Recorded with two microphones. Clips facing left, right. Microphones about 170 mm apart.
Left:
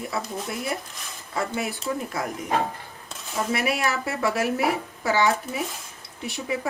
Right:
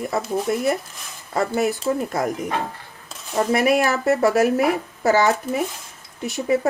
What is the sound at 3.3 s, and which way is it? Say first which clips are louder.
A woman's voice: right 8 dB; 40° right (ahead or behind).